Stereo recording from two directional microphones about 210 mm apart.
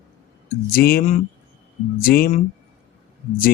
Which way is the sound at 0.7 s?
45° left (ahead or behind).